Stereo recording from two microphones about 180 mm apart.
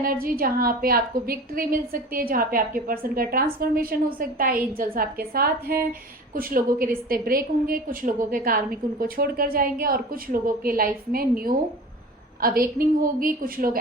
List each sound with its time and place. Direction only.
0.0 s a woman's voice: 50° right (ahead or behind)